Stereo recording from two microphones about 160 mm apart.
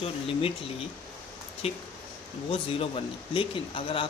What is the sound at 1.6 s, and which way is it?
Speech, 40° left (ahead or behind).